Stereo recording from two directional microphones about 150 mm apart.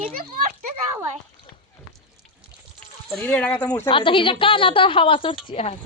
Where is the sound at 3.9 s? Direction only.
35° left (ahead or behind).